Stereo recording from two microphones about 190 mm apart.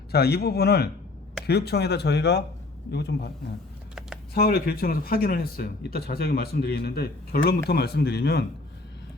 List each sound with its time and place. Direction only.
0.1 s speech: 55° left (ahead or behind)
4.4 s speech: 55° left (ahead or behind)